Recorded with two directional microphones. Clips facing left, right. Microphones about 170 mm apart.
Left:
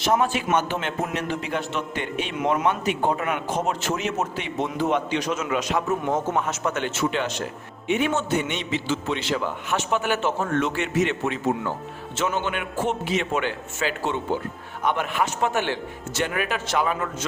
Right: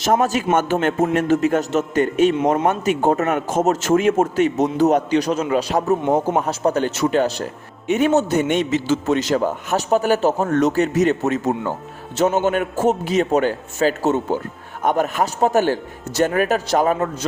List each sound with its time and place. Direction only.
0.0 s a man's voice: 45° right (ahead or behind)